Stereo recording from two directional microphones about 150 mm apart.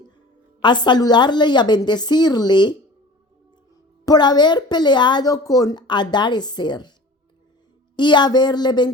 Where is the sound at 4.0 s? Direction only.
25° left (ahead or behind).